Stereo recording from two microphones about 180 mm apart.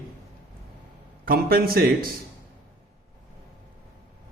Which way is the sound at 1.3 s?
55° right (ahead or behind).